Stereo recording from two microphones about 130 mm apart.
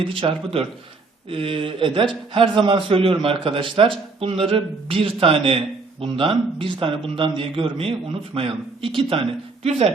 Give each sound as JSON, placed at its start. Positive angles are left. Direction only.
{"t": 0.1, "sound": "speech", "side_deg": -45}